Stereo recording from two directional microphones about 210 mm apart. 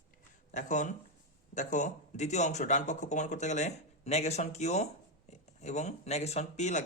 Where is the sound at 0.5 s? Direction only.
35° left (ahead or behind).